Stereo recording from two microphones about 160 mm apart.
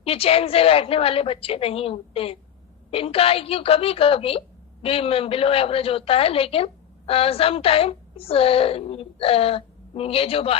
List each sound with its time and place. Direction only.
0.0 s a woman's voice: 35° left (ahead or behind)